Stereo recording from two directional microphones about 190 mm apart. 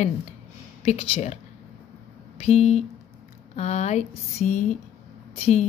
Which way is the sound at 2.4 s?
35° left (ahead or behind).